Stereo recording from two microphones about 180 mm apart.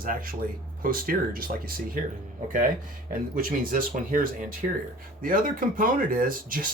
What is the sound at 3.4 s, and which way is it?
Speech, 50° right (ahead or behind).